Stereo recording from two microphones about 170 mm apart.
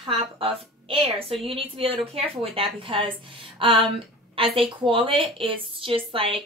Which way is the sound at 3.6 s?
30° right (ahead or behind).